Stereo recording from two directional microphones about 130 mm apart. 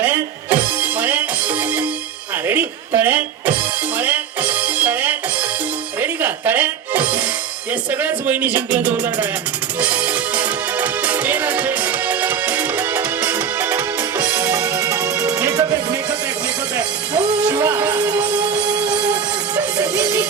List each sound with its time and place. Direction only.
0.0 s music: 15° right (ahead or behind)
7.7 s speech: 15° right (ahead or behind)
9.8 s music: 10° right (ahead or behind); by 16.0 s 25° right (ahead or behind)
17.2 s music: 10° right (ahead or behind)
19.5 s music: 25° right (ahead or behind)